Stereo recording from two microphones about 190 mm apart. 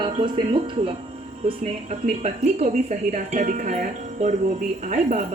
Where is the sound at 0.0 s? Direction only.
25° right (ahead or behind).